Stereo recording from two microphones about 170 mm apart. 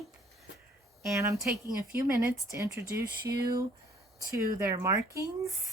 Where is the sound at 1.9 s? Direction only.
15° right (ahead or behind).